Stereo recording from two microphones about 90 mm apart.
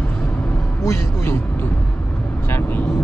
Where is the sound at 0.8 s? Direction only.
30° left (ahead or behind).